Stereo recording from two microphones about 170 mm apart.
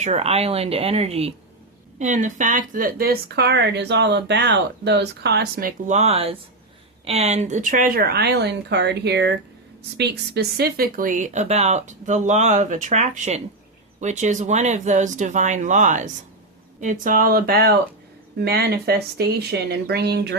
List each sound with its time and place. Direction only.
0.0 s speech: 40° right (ahead or behind); by 5.7 s 60° right (ahead or behind)
5.9 s speech: 40° right (ahead or behind); by 9.4 s 85° right
10.0 s speech: 70° right (ahead or behind)